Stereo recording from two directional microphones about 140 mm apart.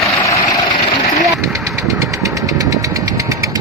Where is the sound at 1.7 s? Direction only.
25° right (ahead or behind).